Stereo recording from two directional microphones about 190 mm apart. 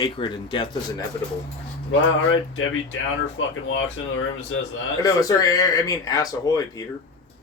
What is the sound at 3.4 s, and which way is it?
Speech, 90° left.